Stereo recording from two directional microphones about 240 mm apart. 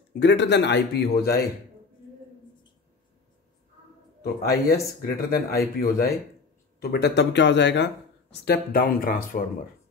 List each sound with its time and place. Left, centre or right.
0.2 s speech: left
4.2 s speech: left